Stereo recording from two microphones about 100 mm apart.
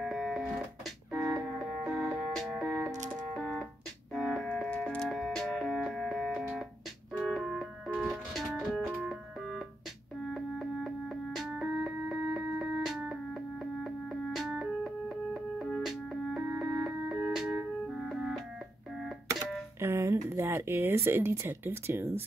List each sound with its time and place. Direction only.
0.0 s music: centre (ahead or behind)
4.6 s music: 10° left (ahead or behind)
7.2 s keyboard: centre (ahead or behind)
7.9 s music: 10° right (ahead or behind)
19.8 s speech: 30° right (ahead or behind)